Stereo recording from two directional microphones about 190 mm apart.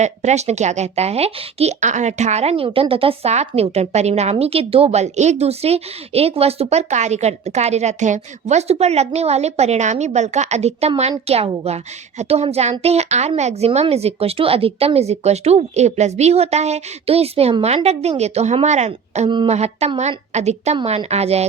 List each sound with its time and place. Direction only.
0.0 s speech: 35° right (ahead or behind)